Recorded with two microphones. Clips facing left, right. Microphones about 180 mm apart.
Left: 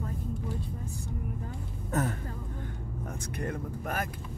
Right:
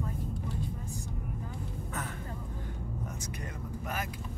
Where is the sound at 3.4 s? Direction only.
55° left (ahead or behind).